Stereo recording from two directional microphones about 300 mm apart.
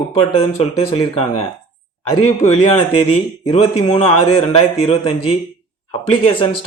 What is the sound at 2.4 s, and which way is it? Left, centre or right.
Speech, centre.